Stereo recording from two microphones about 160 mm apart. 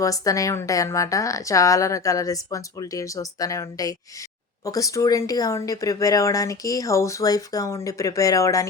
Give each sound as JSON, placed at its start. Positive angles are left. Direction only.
{"t": 0.0, "sound": "speech", "side_deg": 20}